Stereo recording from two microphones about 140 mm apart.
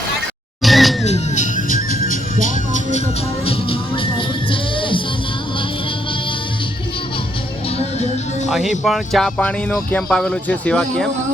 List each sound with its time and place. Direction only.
0.6 s a sound: centre (ahead or behind)
1.0 s music: 55° left (ahead or behind)
1.7 s music: 55° right (ahead or behind)
2.3 s music: 65° left (ahead or behind)
3.4 s music: 40° left (ahead or behind)
8.4 s music: centre (ahead or behind)
8.8 s speech: centre (ahead or behind)